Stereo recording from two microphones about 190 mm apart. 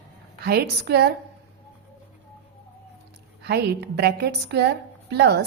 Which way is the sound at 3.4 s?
60° right (ahead or behind).